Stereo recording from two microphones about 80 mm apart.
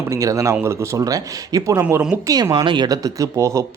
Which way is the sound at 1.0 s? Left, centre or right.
Right.